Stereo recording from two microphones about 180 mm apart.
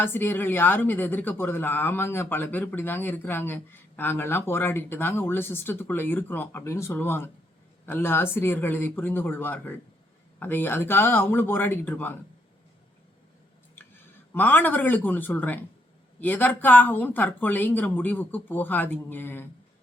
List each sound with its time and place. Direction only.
0.0 s speech: 10° left (ahead or behind)
14.3 s speech: 10° left (ahead or behind)